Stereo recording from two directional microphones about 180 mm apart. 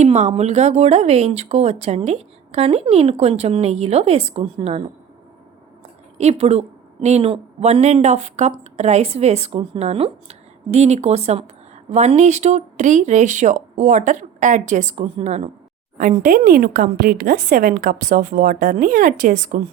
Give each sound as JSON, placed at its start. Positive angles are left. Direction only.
{"t": 0.0, "sound": "speech", "side_deg": -40}
{"t": 6.1, "sound": "a woman's voice", "side_deg": -35}
{"t": 16.0, "sound": "speech", "side_deg": -50}